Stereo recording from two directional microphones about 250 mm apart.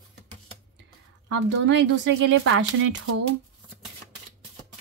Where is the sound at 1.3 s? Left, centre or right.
Right.